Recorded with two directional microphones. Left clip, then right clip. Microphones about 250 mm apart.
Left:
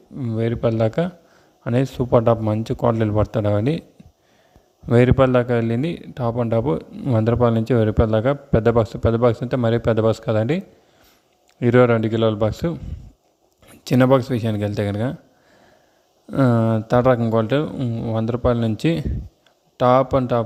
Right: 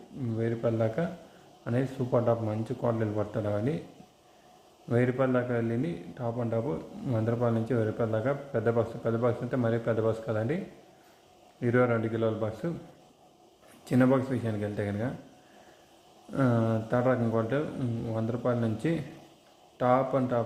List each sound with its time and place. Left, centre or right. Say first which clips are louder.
0.2 s speech: left 9 dB; left
4.9 s speech: left 11 dB; left
11.6 s speech: left 11 dB; left
13.8 s speech: left 9 dB; left
16.3 s speech: left 9 dB; left